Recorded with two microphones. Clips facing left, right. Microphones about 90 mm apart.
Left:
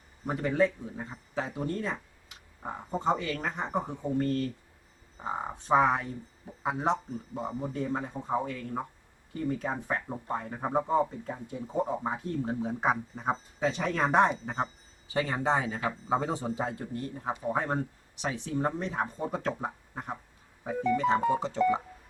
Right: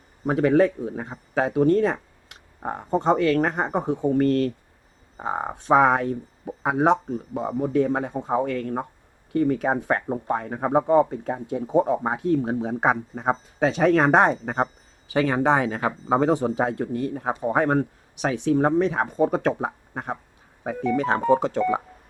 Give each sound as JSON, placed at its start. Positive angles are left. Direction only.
{"t": 0.3, "sound": "speech", "side_deg": -70}
{"t": 20.8, "sound": "music", "side_deg": -65}